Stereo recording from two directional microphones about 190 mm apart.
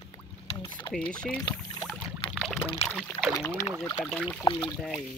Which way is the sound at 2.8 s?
Centre (ahead or behind).